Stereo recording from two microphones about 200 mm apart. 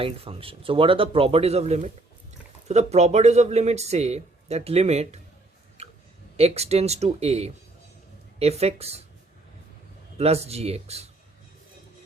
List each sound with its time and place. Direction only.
0.0 s speech: 25° right (ahead or behind)
6.3 s speech: 30° right (ahead or behind)
10.2 s speech: 30° right (ahead or behind)